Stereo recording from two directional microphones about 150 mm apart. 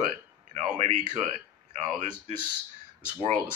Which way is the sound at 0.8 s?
40° right (ahead or behind).